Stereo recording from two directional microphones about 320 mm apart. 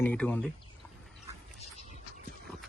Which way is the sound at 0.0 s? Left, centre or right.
Centre.